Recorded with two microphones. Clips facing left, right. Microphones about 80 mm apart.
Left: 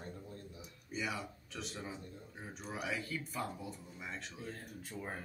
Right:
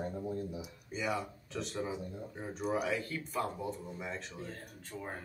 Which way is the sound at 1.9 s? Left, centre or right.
Centre.